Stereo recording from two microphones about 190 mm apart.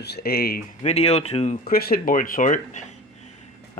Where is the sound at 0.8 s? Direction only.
35° left (ahead or behind).